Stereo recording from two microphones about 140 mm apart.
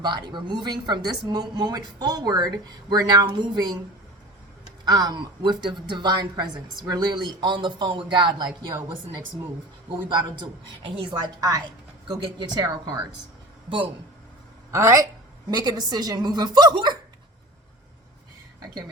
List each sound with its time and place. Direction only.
0.0 s a woman's voice: 30° right (ahead or behind)
4.9 s a woman's voice: 30° right (ahead or behind)
10.8 s a woman's voice: 35° right (ahead or behind)
14.7 s speech: 20° right (ahead or behind)